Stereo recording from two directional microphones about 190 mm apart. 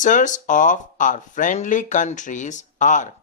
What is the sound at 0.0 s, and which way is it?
Speech, 40° left (ahead or behind).